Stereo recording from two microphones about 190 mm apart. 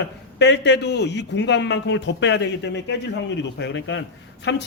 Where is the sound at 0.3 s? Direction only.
65° left (ahead or behind).